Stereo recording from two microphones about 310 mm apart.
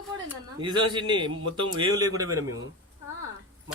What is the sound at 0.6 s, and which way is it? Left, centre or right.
A man's voice, centre.